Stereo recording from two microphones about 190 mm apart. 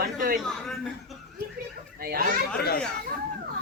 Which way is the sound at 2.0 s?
50° right (ahead or behind).